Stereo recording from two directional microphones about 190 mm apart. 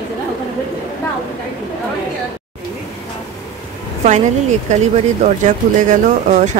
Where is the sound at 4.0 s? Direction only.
40° right (ahead or behind).